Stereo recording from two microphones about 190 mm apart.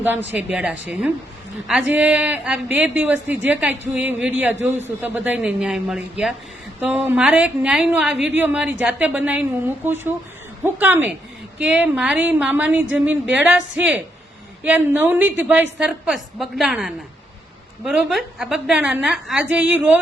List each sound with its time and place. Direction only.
0.0 s a woman's voice: 10° right (ahead or behind)